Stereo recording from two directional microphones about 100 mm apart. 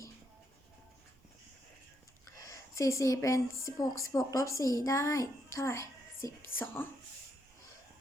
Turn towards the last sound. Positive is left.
turn(degrees=25)  # may be behind; listen again after turning